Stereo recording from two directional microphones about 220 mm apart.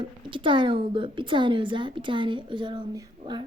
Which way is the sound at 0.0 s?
20° right (ahead or behind).